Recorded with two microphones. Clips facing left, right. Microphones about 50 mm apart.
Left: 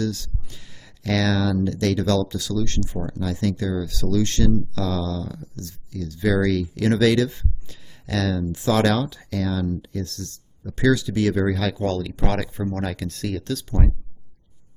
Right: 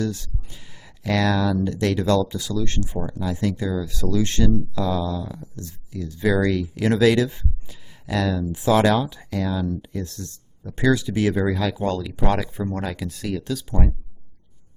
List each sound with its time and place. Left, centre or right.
0.0 s speech: centre
11.4 s speech: centre